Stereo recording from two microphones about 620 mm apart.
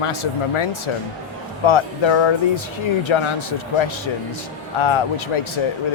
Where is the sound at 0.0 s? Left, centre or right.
Left.